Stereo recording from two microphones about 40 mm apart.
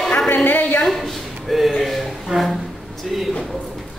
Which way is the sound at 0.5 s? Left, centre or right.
Left.